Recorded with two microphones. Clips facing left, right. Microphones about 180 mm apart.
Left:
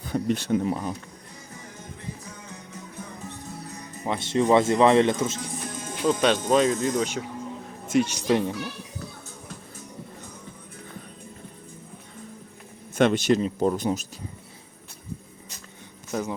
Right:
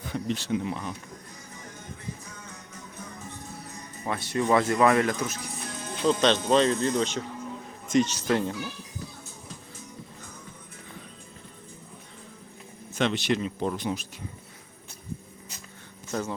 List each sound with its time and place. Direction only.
0.1 s speech: 50° left (ahead or behind)
4.0 s speech: 20° left (ahead or behind)
6.0 s speech: 10° left (ahead or behind)
13.0 s speech: 50° left (ahead or behind)
16.1 s speech: 10° left (ahead or behind)